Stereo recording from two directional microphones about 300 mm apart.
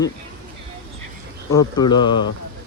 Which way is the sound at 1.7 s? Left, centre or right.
Centre.